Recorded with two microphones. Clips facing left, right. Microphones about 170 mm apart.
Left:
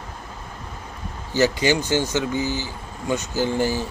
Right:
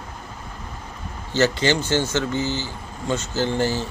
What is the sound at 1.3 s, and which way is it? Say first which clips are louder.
Speech: even; 15° left (ahead or behind).